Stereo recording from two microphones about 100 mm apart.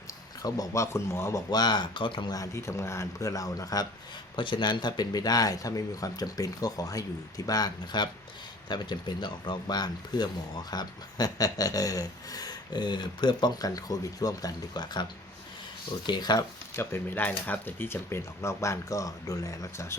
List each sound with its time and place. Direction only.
0.4 s speech: 35° left (ahead or behind)
1.5 s speech: 45° left (ahead or behind)
2.3 s speech: 30° left (ahead or behind)
4.4 s speech: 55° left (ahead or behind)
16.0 s speech: 45° left (ahead or behind)
16.7 s speech: 20° left (ahead or behind)